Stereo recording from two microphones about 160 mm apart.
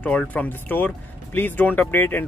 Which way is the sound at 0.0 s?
10° left (ahead or behind).